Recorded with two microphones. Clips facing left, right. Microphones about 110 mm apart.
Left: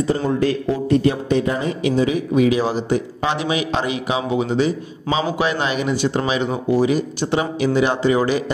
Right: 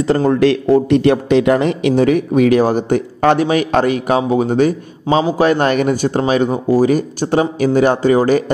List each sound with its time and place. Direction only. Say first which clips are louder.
0.3 s a man's voice: right 7 dB; 70° right (ahead or behind); by 8.5 s 45° right (ahead or behind)